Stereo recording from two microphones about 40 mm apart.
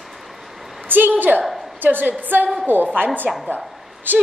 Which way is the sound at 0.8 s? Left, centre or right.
Right.